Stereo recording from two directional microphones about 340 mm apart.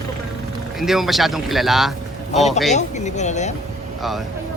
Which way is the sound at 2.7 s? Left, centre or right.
Left.